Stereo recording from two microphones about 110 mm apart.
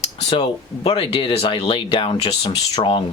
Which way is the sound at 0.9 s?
60° left (ahead or behind).